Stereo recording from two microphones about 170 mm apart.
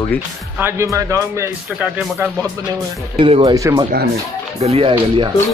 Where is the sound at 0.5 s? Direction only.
15° right (ahead or behind).